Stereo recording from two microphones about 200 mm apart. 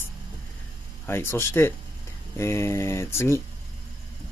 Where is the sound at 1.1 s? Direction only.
10° left (ahead or behind).